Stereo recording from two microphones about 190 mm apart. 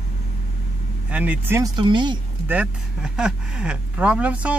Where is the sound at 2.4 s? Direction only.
5° right (ahead or behind).